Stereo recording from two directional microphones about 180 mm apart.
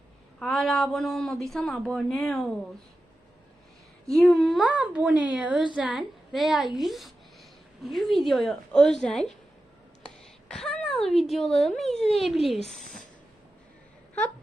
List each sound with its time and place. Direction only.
0.3 s speech: 5° left (ahead or behind)
4.1 s speech: centre (ahead or behind)
10.5 s a sound: 5° left (ahead or behind)
11.2 s speech: centre (ahead or behind)
12.8 s speech: 45° left (ahead or behind)